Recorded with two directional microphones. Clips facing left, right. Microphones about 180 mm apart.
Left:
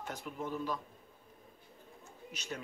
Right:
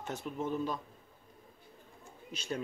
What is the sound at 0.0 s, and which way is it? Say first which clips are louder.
Speech: right 4 dB; 25° right (ahead or behind).